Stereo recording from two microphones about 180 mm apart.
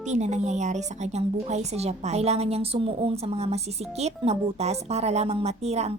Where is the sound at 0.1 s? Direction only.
40° right (ahead or behind).